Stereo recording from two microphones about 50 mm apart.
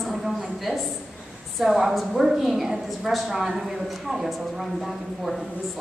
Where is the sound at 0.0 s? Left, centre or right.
Centre.